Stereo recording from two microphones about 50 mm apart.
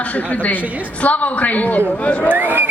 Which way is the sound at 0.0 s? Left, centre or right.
Left.